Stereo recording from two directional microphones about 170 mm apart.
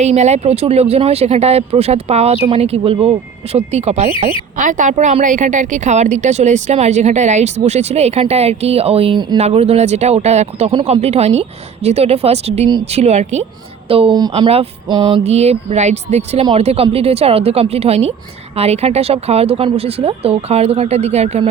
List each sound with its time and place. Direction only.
0.0 s a woman's voice: 40° right (ahead or behind)
13.8 s a sound: 35° right (ahead or behind)
15.2 s speech: 40° right (ahead or behind)